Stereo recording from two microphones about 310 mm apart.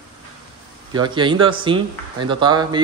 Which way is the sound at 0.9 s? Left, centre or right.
Centre.